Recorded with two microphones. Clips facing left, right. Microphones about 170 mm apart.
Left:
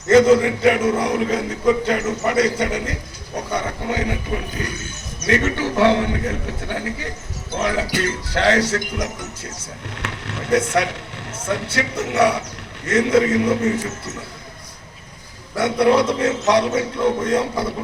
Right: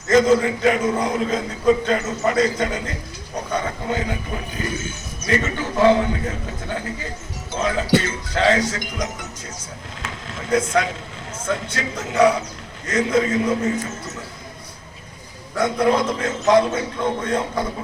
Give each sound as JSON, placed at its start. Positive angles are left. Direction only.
{"t": 0.1, "sound": "a man's voice", "side_deg": 70}
{"t": 9.9, "sound": "a man's voice", "side_deg": 70}
{"t": 15.5, "sound": "a man's voice", "side_deg": 70}